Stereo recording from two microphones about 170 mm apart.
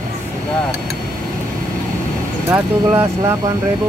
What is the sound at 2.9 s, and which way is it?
Speech, 20° right (ahead or behind).